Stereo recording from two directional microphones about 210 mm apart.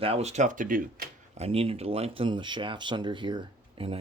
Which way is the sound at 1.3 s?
30° right (ahead or behind).